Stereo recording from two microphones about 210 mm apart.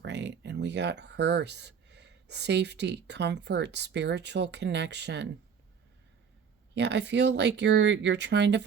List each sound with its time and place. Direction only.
0.0 s speech: 55° right (ahead or behind)
6.7 s speech: 55° right (ahead or behind)